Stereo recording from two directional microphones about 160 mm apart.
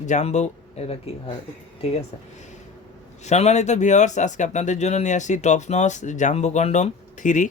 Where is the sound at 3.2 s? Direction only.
45° left (ahead or behind).